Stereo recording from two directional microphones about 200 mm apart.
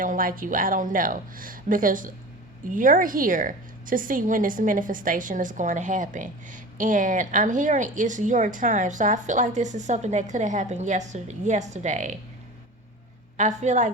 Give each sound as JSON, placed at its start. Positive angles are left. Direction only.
{"t": 0.0, "sound": "a woman's voice", "side_deg": -45}
{"t": 13.3, "sound": "a woman's voice", "side_deg": -35}